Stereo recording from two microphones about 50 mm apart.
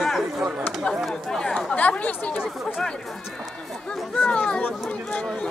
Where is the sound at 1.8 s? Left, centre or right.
Left.